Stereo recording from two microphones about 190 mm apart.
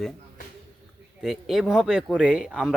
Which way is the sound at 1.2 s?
Centre (ahead or behind).